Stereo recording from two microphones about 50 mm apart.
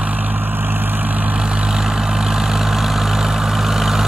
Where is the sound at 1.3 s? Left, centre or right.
Centre.